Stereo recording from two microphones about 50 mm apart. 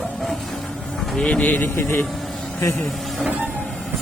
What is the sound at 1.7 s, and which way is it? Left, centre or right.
Speech, left.